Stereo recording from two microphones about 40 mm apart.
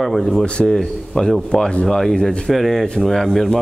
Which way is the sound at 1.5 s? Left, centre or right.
Left.